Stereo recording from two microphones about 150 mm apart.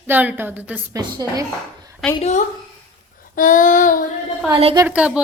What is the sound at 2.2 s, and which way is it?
Speech, 50° left (ahead or behind).